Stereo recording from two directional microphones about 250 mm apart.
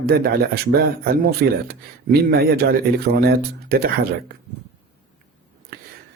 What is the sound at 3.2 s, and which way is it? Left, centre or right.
Speech, right.